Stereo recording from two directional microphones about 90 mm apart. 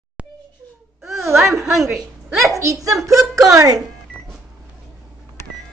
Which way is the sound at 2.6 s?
40° right (ahead or behind).